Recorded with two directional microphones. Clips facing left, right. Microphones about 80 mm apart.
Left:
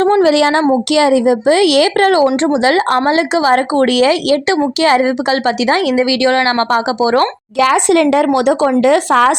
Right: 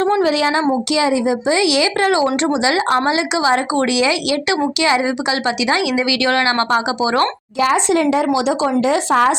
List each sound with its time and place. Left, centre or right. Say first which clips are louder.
0.2 s speech: left 5 dB; left
0.6 s speech: left 5 dB; left
2.2 s speech: left 5 dB; left
2.6 s speech: left 4 dB; left
7.6 s speech: left 4 dB; left